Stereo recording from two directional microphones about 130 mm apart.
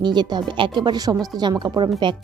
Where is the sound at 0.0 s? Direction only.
35° right (ahead or behind).